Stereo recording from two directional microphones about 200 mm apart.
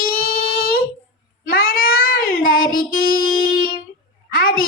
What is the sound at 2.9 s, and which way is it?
Music, 50° left (ahead or behind).